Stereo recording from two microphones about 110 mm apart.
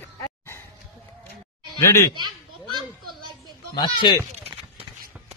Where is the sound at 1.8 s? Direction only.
25° left (ahead or behind).